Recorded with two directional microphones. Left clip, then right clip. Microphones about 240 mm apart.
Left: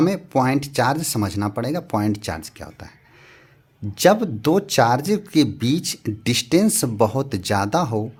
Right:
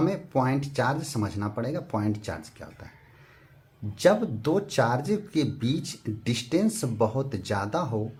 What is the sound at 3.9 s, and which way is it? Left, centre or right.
Speech, left.